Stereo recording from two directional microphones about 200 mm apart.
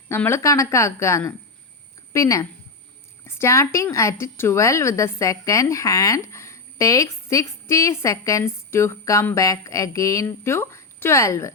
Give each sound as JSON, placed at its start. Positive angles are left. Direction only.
{"t": 0.1, "sound": "speech", "side_deg": 10}